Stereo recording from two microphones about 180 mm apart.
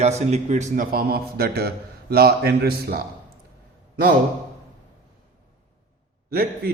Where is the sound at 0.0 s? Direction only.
40° right (ahead or behind); by 3.0 s 60° right (ahead or behind).